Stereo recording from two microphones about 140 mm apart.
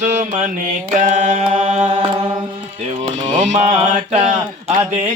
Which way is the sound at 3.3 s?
55° right (ahead or behind).